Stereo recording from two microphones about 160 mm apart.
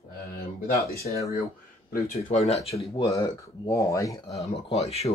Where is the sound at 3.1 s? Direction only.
20° left (ahead or behind).